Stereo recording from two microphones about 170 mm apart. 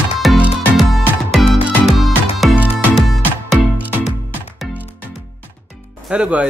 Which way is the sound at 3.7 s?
10° right (ahead or behind).